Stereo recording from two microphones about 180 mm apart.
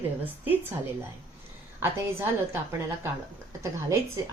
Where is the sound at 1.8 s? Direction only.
15° right (ahead or behind).